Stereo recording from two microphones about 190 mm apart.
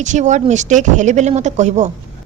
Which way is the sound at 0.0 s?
40° right (ahead or behind).